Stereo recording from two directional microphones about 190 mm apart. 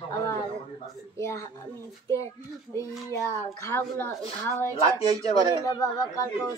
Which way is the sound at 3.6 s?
15° left (ahead or behind).